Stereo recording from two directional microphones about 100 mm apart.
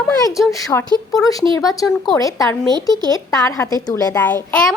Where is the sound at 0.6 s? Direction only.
35° left (ahead or behind).